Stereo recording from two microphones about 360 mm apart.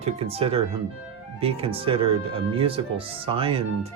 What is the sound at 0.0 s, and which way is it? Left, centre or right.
Speech, centre.